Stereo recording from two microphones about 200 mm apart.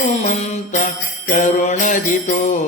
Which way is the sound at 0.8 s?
40° left (ahead or behind).